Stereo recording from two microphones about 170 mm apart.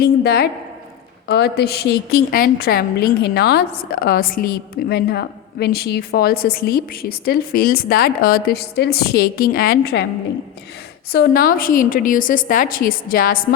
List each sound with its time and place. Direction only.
0.0 s a woman's voice: 70° left (ahead or behind)
11.1 s a woman's voice: 65° left (ahead or behind)